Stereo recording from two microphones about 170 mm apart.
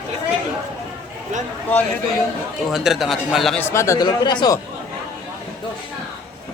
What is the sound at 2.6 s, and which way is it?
Speech, centre (ahead or behind).